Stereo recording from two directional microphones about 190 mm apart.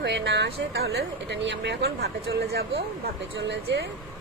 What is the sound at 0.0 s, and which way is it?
Speech, 65° right (ahead or behind).